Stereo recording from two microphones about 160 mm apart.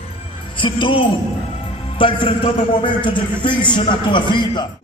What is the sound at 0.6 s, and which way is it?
A man's voice, 30° left (ahead or behind).